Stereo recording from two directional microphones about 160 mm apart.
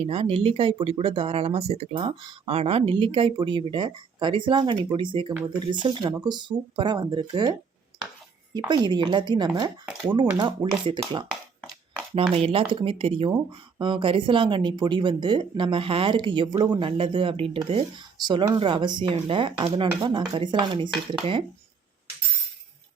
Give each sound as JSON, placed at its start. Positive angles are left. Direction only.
{"t": 0.0, "sound": "speech", "side_deg": -40}
{"t": 8.5, "sound": "speech", "side_deg": -25}